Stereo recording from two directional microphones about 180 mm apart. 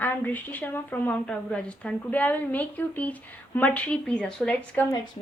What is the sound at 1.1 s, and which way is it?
A woman's voice, 5° left (ahead or behind).